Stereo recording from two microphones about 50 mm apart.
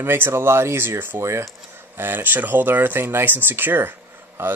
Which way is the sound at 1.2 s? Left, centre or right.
Right.